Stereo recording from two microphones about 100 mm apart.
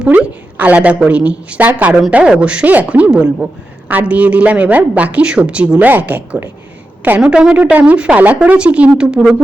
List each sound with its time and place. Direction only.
0.0 s speech: 15° right (ahead or behind)